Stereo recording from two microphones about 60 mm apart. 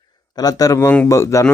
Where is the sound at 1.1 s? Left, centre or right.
Left.